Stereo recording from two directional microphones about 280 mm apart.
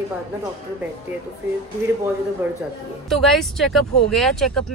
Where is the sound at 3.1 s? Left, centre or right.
Centre.